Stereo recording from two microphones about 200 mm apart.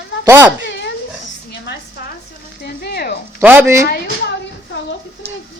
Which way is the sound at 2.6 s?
50° left (ahead or behind).